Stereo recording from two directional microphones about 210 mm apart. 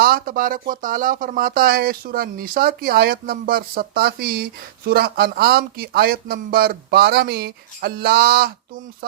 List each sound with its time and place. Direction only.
0.0 s speech: 45° right (ahead or behind)